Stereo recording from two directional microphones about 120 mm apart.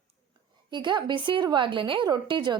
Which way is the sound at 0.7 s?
40° right (ahead or behind).